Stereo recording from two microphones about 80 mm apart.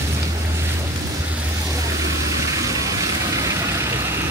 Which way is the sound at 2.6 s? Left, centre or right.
Right.